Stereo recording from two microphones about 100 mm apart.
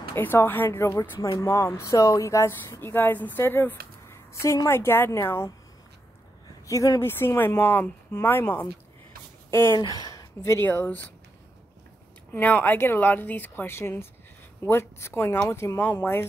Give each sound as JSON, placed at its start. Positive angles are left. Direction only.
{"t": 0.1, "sound": "speech", "side_deg": 25}
{"t": 6.7, "sound": "speech", "side_deg": 35}
{"t": 9.8, "sound": "speech", "side_deg": 40}
{"t": 12.3, "sound": "speech", "side_deg": 15}